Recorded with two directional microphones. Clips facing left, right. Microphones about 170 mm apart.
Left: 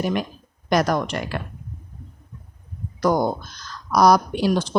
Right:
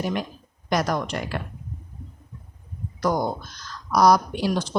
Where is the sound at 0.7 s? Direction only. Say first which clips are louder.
Left 4 dB; 80° left.